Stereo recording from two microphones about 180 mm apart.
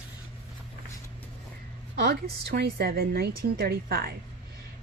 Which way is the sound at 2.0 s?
65° right (ahead or behind).